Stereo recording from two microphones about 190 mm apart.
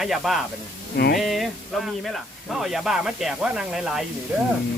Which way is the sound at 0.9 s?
55° left (ahead or behind).